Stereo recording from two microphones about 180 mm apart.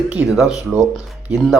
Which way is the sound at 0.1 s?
5° right (ahead or behind).